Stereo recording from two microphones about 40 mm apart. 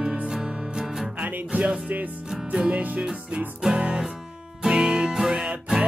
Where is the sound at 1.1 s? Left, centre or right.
Right.